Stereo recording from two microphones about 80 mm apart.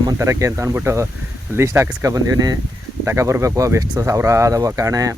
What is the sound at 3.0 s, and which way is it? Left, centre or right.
Speech, right.